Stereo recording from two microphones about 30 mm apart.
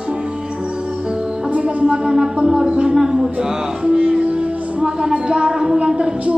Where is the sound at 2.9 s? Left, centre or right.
Centre.